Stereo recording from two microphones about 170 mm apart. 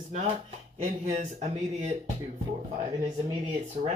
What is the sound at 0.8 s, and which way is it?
Speech, 45° right (ahead or behind).